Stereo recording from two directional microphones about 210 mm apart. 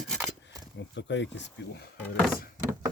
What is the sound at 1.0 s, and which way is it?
Speech, 60° left (ahead or behind).